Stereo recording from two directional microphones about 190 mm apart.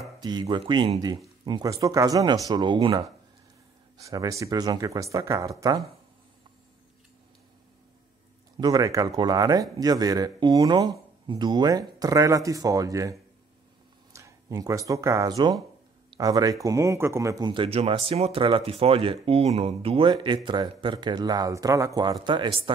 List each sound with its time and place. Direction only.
0.2 s speech: 20° right (ahead or behind)
8.5 s speech: 20° right (ahead or behind)